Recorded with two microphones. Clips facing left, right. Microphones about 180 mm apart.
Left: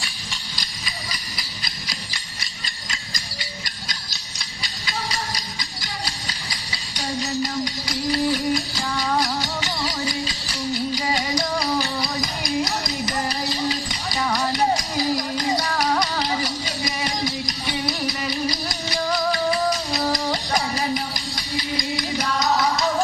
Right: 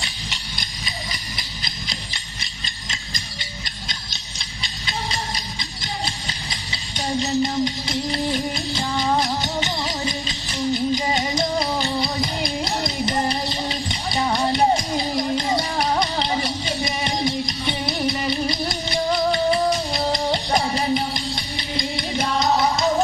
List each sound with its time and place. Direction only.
0.0 s engine: 20° right (ahead or behind)
3.8 s music: 25° right (ahead or behind)